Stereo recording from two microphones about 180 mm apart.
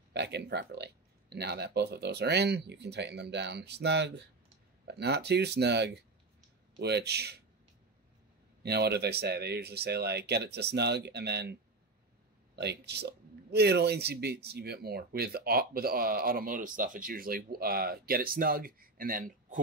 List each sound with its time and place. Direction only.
0.1 s speech: 70° right (ahead or behind)
8.6 s speech: 65° right (ahead or behind)
12.5 s speech: 65° right (ahead or behind); by 19.6 s 50° right (ahead or behind)